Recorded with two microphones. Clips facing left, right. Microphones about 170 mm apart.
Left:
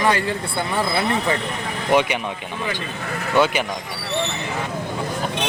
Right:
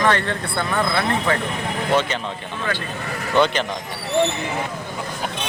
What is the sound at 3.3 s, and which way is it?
Speech, 10° left (ahead or behind).